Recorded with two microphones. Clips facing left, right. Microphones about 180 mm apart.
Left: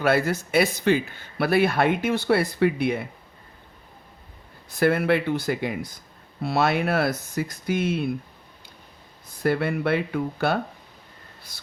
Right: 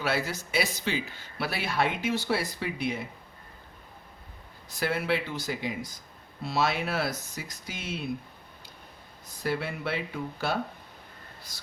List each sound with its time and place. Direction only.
0.0 s speech: 55° left (ahead or behind)
4.7 s speech: 55° left (ahead or behind)
9.4 s speech: 60° left (ahead or behind)